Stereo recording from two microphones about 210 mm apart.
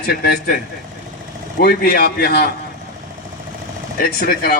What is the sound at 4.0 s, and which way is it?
Speech, 50° left (ahead or behind).